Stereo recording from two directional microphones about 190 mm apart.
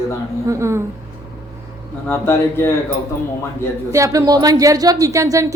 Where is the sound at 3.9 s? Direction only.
15° right (ahead or behind).